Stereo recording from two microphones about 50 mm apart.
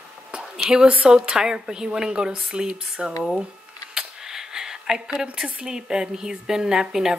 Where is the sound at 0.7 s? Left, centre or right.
Centre.